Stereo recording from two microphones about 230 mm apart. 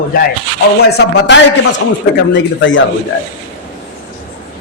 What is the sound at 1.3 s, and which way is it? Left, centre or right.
A woman's voice, left.